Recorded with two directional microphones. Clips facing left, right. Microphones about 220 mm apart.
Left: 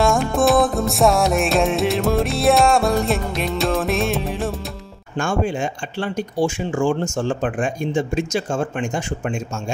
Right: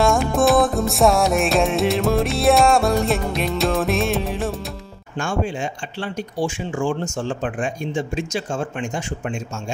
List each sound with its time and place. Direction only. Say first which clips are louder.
0.0 s music: even; centre (ahead or behind)
5.1 s speech: left 3 dB; 45° left (ahead or behind)